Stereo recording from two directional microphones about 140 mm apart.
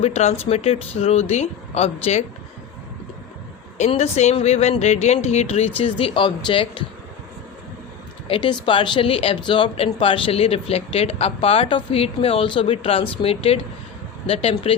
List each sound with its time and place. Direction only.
0.0 s speech: 50° left (ahead or behind)
3.8 s speech: 50° left (ahead or behind)
8.3 s speech: 35° left (ahead or behind)